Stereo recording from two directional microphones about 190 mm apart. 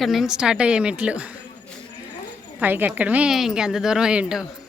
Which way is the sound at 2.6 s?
10° right (ahead or behind).